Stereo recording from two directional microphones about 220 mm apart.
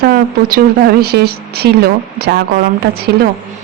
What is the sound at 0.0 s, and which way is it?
Speech, 45° right (ahead or behind).